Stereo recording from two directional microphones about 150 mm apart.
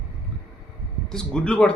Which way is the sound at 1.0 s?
5° left (ahead or behind).